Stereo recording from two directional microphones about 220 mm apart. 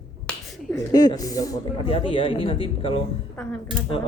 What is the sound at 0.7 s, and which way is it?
Speech, 15° left (ahead or behind).